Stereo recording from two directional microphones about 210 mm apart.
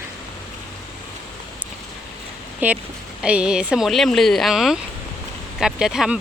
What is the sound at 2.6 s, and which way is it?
Speech, 10° right (ahead or behind).